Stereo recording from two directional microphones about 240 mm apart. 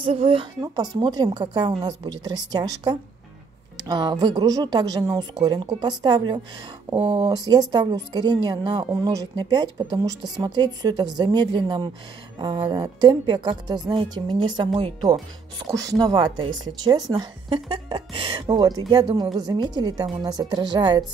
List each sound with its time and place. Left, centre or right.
0.0 s speech: right
16.4 s speech: right
16.8 s speech: centre